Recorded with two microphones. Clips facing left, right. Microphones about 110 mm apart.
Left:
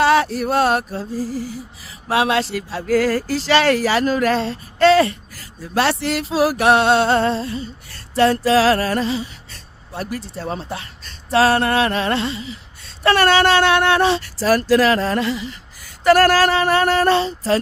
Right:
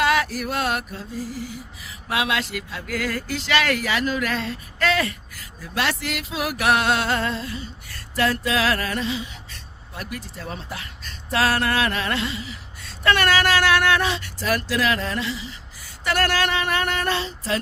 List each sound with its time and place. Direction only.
0.0 s speech: 30° left (ahead or behind); by 15.5 s 50° left (ahead or behind)
16.0 s speech: 40° left (ahead or behind)